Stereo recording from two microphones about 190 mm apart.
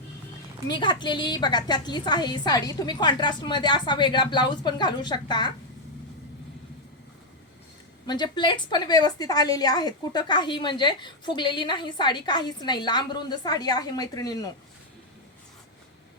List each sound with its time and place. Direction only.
0.7 s a woman's voice: 25° left (ahead or behind)
8.0 s a woman's voice: 20° left (ahead or behind)